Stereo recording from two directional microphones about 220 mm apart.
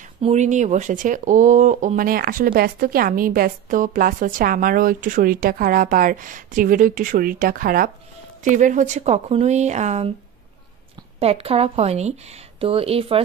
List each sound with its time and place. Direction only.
0.2 s speech: 30° right (ahead or behind)
11.1 s speech: 25° right (ahead or behind)